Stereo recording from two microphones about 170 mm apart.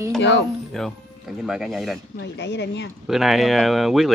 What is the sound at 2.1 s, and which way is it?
Speech, 90° left.